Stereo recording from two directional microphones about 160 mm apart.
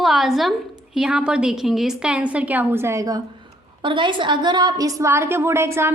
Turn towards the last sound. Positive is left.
turn(degrees=-15)  # may be behind; listen again after turning